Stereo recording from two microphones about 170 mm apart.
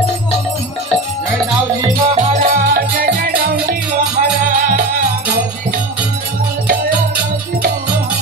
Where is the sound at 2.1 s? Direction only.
40° right (ahead or behind).